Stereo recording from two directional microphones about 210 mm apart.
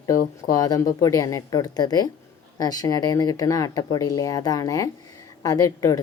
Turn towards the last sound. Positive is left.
turn(degrees=15)  # may be behind; listen again after turning